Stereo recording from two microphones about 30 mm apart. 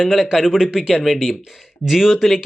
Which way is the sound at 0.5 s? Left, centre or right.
Centre.